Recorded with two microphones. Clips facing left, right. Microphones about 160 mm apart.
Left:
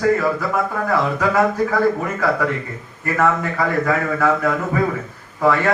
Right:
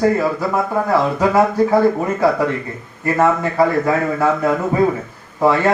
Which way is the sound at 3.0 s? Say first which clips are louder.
Right 3 dB; 25° right (ahead or behind).